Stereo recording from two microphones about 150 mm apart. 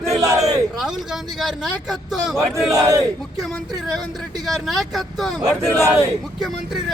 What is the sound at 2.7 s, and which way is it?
Speech, 20° right (ahead or behind).